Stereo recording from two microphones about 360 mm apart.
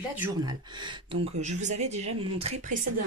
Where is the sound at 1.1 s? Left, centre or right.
Centre.